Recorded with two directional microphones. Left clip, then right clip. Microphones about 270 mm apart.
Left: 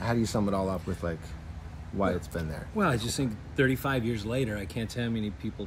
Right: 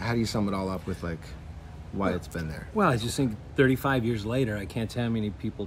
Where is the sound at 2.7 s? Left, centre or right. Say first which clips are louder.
Right 3 dB; centre.